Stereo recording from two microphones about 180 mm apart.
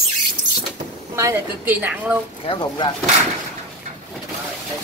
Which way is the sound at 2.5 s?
25° left (ahead or behind).